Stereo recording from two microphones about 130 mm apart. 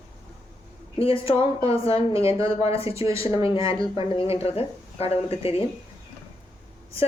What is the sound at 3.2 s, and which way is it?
Speech, 25° right (ahead or behind).